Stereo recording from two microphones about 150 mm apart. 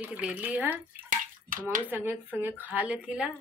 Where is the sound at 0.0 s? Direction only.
10° right (ahead or behind).